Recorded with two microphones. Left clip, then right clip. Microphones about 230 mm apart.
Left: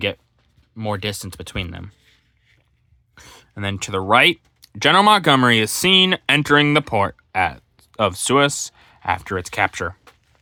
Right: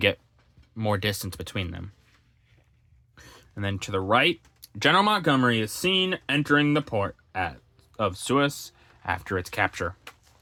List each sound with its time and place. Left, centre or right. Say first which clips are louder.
0.8 s speech: left 2 dB; centre
3.2 s speech: left 5 dB; centre